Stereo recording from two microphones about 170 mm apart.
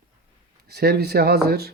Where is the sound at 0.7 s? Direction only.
70° right (ahead or behind).